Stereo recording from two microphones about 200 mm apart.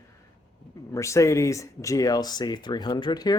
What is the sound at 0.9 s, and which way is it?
Speech, 15° left (ahead or behind).